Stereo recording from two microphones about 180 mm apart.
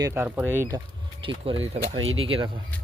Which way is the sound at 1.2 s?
30° right (ahead or behind).